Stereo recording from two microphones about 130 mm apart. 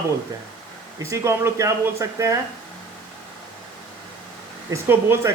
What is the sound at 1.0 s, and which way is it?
A man's voice, 20° right (ahead or behind).